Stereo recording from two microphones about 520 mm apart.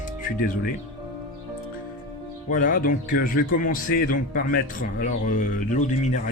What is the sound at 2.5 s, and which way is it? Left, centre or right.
Speech, centre.